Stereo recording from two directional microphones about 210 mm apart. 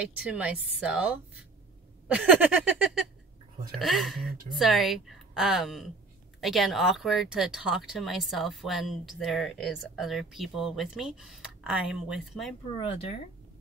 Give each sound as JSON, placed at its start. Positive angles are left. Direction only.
{"t": 0.0, "sound": "speech", "side_deg": -5}
{"t": 12.8, "sound": "speech", "side_deg": 30}